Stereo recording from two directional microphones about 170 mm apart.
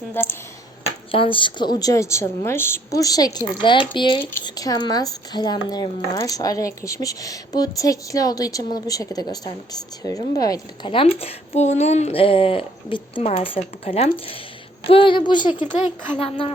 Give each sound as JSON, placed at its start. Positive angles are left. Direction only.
{"t": 0.1, "sound": "speech", "side_deg": 15}
{"t": 1.1, "sound": "speech", "side_deg": 30}